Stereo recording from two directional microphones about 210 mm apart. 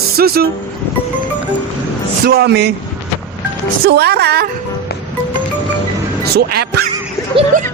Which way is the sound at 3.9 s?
50° right (ahead or behind).